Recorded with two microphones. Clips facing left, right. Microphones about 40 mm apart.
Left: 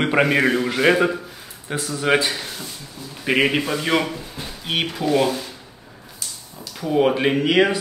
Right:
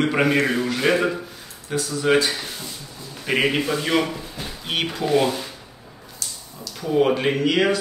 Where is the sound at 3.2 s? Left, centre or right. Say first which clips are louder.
Left 2 dB; centre.